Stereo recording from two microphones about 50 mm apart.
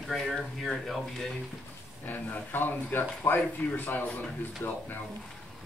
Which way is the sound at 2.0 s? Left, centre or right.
Left.